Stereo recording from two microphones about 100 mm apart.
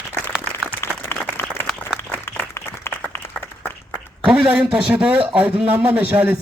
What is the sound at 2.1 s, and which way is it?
Applause, 25° left (ahead or behind).